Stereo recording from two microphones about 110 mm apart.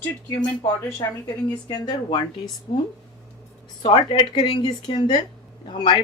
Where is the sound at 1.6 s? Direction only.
40° left (ahead or behind).